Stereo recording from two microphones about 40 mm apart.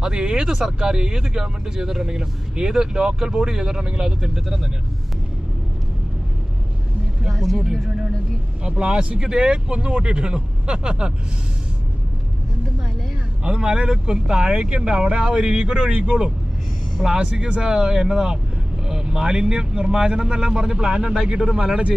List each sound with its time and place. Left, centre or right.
0.0 s speech: centre
7.2 s speech: centre
8.6 s speech: right
13.4 s speech: right
14.6 s speech: right
21.1 s speech: centre